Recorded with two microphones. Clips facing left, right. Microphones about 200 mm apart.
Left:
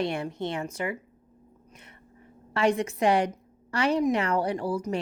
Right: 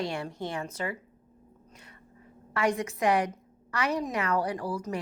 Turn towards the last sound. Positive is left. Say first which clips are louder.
# left 3 dB
turn(degrees=25)  # may be behind; listen again after turning